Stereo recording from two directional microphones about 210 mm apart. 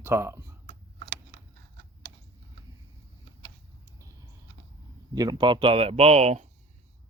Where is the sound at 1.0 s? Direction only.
55° right (ahead or behind).